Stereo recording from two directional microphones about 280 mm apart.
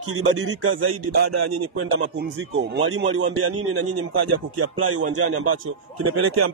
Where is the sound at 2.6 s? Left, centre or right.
Right.